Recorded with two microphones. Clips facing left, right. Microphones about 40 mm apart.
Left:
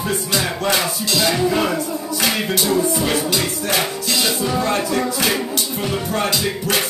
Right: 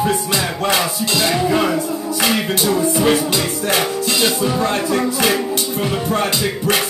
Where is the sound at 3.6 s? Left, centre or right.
Right.